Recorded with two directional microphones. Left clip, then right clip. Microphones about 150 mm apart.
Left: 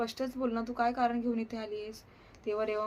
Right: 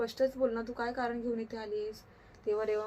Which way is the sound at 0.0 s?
15° left (ahead or behind).